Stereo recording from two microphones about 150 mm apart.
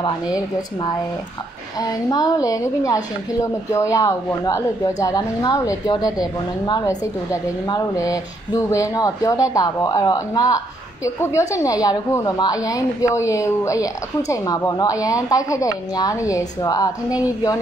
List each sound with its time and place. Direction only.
1.8 s a woman's voice: 25° left (ahead or behind)